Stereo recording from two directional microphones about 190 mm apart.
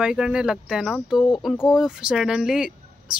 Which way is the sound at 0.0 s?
5° right (ahead or behind).